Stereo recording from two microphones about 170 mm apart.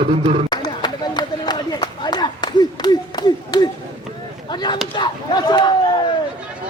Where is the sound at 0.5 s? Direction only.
25° left (ahead or behind).